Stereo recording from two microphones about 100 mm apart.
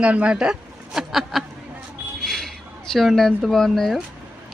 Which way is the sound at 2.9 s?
Centre (ahead or behind).